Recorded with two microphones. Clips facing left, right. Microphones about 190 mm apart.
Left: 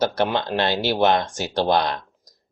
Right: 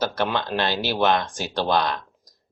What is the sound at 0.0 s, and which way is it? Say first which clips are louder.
Speech: left 3 dB; 15° left (ahead or behind).